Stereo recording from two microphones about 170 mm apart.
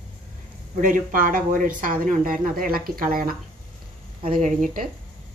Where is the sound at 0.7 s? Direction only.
50° right (ahead or behind).